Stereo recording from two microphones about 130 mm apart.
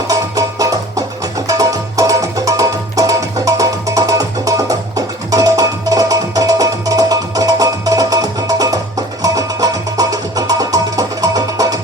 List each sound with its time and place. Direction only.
0.1 s music: 25° right (ahead or behind)